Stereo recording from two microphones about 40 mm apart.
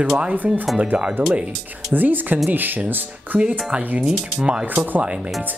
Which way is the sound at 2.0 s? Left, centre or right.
Right.